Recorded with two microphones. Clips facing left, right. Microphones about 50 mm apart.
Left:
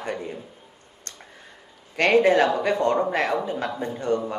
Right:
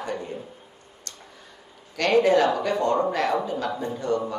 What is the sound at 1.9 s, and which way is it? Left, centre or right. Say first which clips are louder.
Speech: left 1 dB; left.